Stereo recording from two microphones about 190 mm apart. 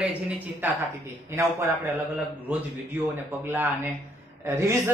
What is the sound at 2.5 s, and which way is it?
A man's voice, 10° right (ahead or behind).